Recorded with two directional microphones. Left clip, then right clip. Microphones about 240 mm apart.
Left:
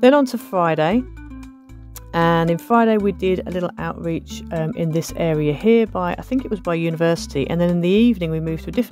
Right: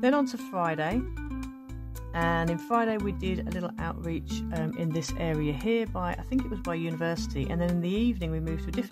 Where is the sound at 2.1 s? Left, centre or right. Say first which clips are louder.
Left 11 dB; left.